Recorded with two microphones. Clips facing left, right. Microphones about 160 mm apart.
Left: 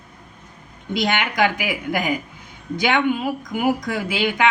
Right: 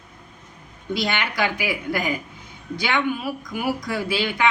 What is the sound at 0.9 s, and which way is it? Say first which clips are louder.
Speech: left 4 dB; 20° left (ahead or behind).